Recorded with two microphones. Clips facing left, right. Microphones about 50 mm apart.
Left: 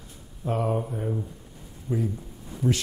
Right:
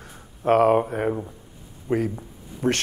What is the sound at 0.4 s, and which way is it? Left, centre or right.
A man's voice, right.